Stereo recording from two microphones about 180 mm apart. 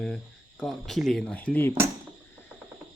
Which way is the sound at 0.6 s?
Centre (ahead or behind).